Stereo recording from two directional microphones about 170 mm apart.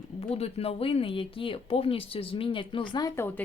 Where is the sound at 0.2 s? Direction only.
35° left (ahead or behind).